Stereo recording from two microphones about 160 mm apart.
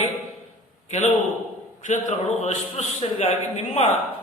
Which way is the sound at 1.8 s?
50° left (ahead or behind).